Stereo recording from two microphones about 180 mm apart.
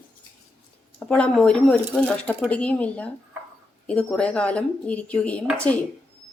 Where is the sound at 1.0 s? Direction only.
5° left (ahead or behind).